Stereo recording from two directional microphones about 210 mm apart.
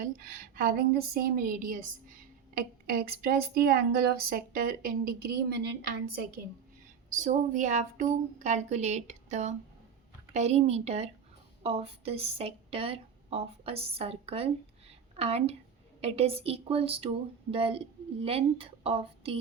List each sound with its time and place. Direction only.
0.0 s a woman's voice: 40° right (ahead or behind)
7.1 s a woman's voice: 35° right (ahead or behind)